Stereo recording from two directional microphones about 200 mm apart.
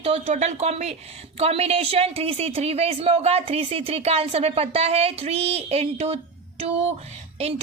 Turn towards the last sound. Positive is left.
turn(degrees=-30)  # may be behind; listen again after turning